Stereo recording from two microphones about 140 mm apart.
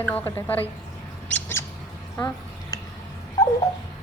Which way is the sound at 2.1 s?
25° left (ahead or behind).